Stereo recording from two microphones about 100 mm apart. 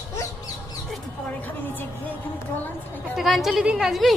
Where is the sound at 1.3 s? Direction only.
15° left (ahead or behind).